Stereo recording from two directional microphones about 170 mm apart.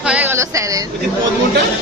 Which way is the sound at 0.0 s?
5° right (ahead or behind).